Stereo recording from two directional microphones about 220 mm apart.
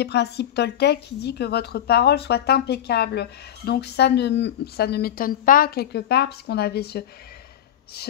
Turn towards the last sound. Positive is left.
turn(degrees=45)  # may be behind; listen again after turning